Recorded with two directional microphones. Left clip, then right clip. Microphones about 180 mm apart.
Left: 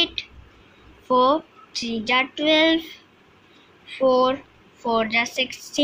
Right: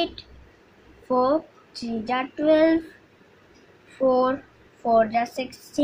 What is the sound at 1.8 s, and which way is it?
Speech, centre (ahead or behind).